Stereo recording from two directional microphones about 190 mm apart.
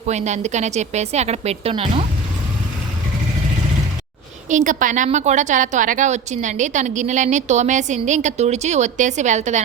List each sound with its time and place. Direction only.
0.1 s a woman's voice: 35° right (ahead or behind)
4.4 s a woman's voice: 40° right (ahead or behind)